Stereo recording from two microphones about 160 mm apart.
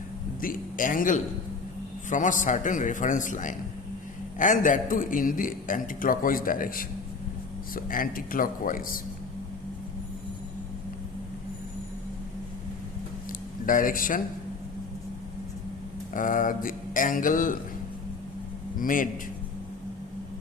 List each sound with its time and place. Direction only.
0.4 s a man's voice: 60° left (ahead or behind)
13.7 s a man's voice: 60° left (ahead or behind)
16.1 s a man's voice: 60° left (ahead or behind)
18.8 s a man's voice: 60° left (ahead or behind)